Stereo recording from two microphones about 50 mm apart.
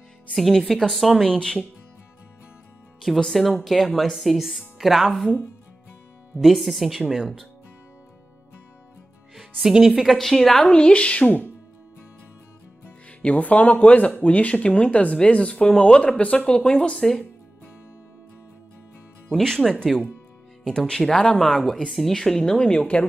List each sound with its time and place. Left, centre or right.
0.3 s speech: centre
1.2 s a woman's voice: centre
3.3 s speech: centre
6.4 s speech: centre
9.3 s speech: centre
10.7 s speech: left
13.2 s speech: left
17.0 s a woman's voice: centre
19.3 s a woman's voice: centre
22.6 s speech: left